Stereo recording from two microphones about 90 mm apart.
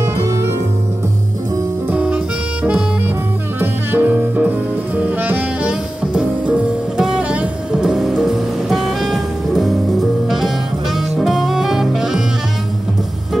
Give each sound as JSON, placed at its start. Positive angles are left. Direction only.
{"t": 0.0, "sound": "music", "side_deg": -30}
{"t": 1.9, "sound": "music", "side_deg": -10}
{"t": 3.9, "sound": "saxophone", "side_deg": -20}
{"t": 11.1, "sound": "music", "side_deg": -5}